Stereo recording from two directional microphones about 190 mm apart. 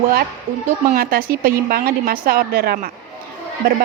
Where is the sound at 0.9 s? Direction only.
50° right (ahead or behind).